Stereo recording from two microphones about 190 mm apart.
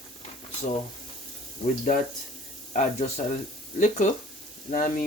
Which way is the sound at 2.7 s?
35° left (ahead or behind).